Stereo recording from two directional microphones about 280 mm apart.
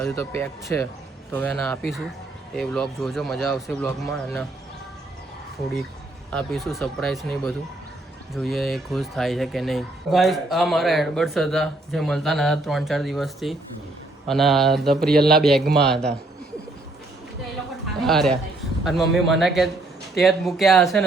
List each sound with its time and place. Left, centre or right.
0.0 s speech: centre
6.3 s speech: centre
15.0 s a man's voice: right
15.7 s speech: centre
18.0 s a man's voice: centre